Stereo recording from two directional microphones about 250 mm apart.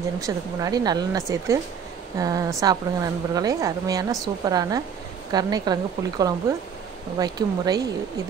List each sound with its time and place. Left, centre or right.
0.2 s a woman's voice: centre